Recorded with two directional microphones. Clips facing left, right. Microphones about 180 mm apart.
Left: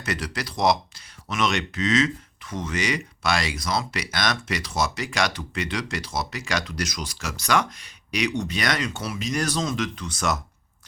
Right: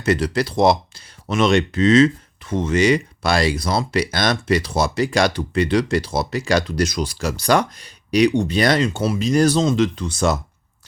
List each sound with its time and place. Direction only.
0.0 s speech: 30° right (ahead or behind)